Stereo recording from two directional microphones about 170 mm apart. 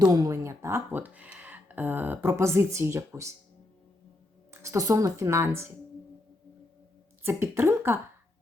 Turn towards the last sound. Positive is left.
turn(degrees=-15)  # may be behind; listen again after turning